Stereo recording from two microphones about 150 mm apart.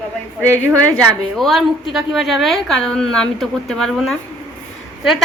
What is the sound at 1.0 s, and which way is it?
A woman's voice, centre (ahead or behind).